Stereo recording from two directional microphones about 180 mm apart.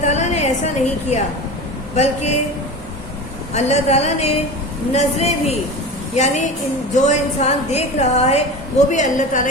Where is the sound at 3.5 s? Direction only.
35° left (ahead or behind).